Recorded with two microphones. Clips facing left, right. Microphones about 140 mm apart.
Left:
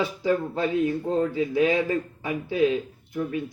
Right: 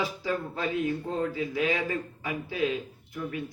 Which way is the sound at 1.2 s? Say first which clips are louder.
Left 8 dB; 30° left (ahead or behind).